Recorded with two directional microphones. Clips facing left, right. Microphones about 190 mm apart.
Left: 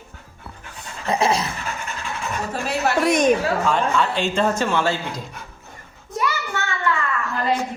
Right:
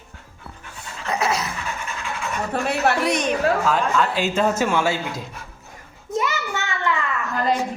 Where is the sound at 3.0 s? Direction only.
50° left (ahead or behind).